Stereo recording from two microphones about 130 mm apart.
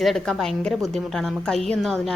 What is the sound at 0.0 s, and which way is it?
A woman's voice, centre (ahead or behind).